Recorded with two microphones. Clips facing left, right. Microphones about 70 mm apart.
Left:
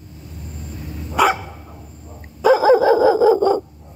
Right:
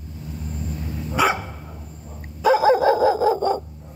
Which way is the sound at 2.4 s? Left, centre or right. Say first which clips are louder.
Left 3 dB; centre.